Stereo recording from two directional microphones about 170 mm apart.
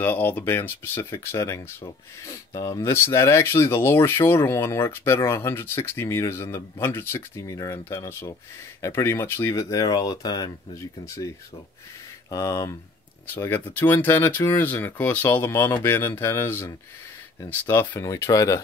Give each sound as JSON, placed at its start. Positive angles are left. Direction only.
{"t": 0.0, "sound": "speech", "side_deg": 10}